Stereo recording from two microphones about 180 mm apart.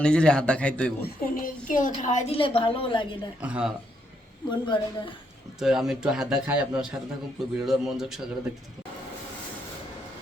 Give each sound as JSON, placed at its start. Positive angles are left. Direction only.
{"t": 0.0, "sound": "a man's voice", "side_deg": 5}
{"t": 1.0, "sound": "a woman's voice", "side_deg": 50}
{"t": 3.4, "sound": "speech", "side_deg": -5}
{"t": 4.4, "sound": "speech", "side_deg": 25}
{"t": 5.5, "sound": "a man's voice", "side_deg": -5}